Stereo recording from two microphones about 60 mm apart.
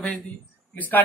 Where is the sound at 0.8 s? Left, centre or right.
Left.